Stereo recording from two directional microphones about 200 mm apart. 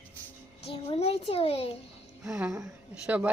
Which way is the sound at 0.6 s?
30° left (ahead or behind).